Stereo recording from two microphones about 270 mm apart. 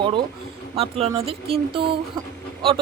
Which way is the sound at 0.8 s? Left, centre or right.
Right.